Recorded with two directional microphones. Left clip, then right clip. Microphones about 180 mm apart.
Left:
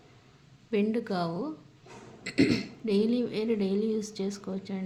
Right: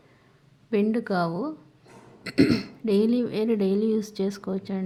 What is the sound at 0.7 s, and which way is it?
A woman's voice, 30° right (ahead or behind).